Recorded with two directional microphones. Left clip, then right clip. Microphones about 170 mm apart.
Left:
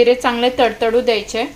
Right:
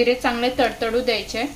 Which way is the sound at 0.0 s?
15° left (ahead or behind).